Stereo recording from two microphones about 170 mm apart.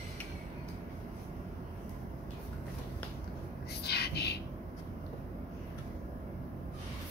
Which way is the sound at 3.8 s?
70° left (ahead or behind).